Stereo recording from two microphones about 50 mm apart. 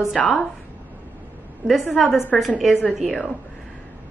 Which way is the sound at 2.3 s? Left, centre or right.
Centre.